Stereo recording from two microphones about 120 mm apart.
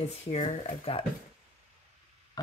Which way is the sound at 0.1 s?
75° left (ahead or behind).